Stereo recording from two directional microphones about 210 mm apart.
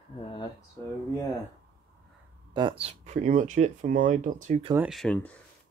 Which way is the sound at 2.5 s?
20° right (ahead or behind).